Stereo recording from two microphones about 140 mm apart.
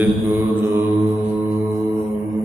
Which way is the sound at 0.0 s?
15° right (ahead or behind).